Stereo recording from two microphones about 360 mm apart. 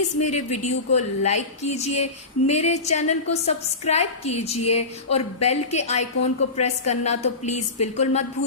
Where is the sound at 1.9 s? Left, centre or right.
Left.